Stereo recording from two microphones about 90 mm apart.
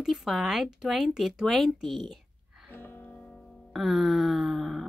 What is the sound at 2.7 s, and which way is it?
Music, 25° left (ahead or behind).